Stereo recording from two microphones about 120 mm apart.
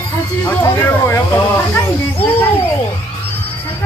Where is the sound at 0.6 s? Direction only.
20° left (ahead or behind).